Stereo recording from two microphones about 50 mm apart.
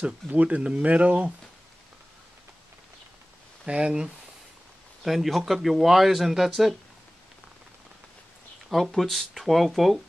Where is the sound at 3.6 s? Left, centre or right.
Centre.